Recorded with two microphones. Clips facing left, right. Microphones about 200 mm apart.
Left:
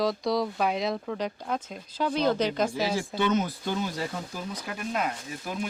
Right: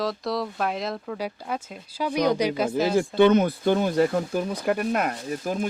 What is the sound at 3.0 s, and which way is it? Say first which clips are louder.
Speech: right 11 dB; 60° right (ahead or behind).